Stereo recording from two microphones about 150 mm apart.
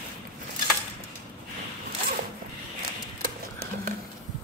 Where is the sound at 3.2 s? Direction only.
65° right (ahead or behind).